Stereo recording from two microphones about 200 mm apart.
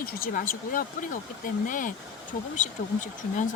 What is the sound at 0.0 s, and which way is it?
Speech, 45° left (ahead or behind).